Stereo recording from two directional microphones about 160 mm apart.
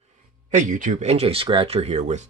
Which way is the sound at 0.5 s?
55° right (ahead or behind).